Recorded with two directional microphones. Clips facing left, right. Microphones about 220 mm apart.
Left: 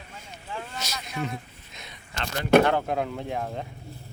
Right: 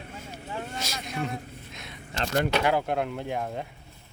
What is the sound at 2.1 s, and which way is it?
Speech, 40° right (ahead or behind).